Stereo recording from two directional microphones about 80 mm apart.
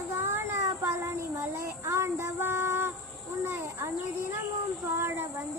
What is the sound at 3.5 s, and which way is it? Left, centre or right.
Cricket, right.